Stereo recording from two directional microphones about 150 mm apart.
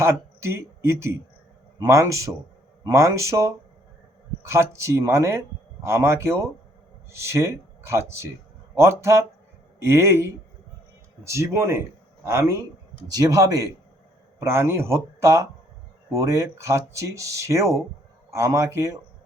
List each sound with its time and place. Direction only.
0.0 s speech: 15° right (ahead or behind)